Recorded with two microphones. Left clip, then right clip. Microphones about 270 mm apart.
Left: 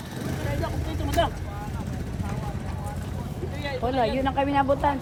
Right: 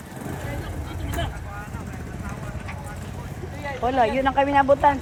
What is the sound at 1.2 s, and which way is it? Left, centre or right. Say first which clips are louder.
Vehicle: left 8 dB; centre.